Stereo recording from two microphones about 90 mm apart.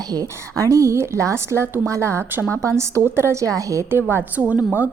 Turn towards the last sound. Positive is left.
turn(degrees=-20)  # may be behind; listen again after turning